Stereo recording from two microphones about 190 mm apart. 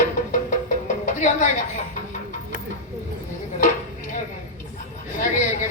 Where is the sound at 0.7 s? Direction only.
40° left (ahead or behind).